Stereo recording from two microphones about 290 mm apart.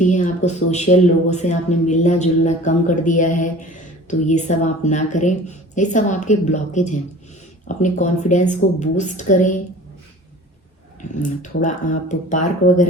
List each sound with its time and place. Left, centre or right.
0.0 s speech: left
11.1 s speech: left